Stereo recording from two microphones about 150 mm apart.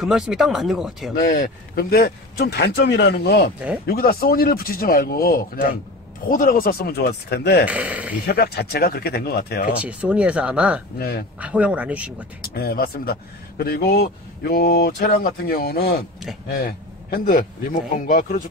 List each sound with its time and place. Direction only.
0.0 s speech: 5° right (ahead or behind)
1.2 s speech: 70° left (ahead or behind); by 5.7 s 90° left
6.3 s speech: 75° left (ahead or behind); by 7.6 s 90° left
7.6 s speech: 10° right (ahead or behind)
8.3 s speech: 90° left
9.8 s speech: 10° right (ahead or behind)
11.0 s speech: 90° left
11.3 s speech: 10° right (ahead or behind)
12.4 s speech: 90° left
17.1 s speech: 70° left (ahead or behind)